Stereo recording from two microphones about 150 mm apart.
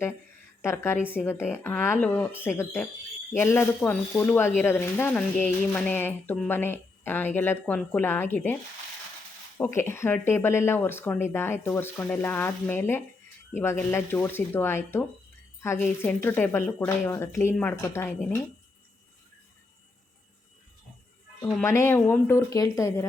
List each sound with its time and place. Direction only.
0.6 s speech: 15° left (ahead or behind)
9.6 s speech: 15° left (ahead or behind)
21.6 s speech: 20° left (ahead or behind)